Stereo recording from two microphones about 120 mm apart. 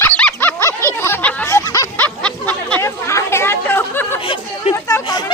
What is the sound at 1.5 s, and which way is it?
Snicker, 30° left (ahead or behind).